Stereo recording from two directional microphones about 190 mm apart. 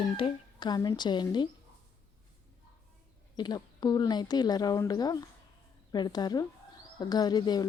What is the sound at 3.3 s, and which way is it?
Speech, 20° left (ahead or behind).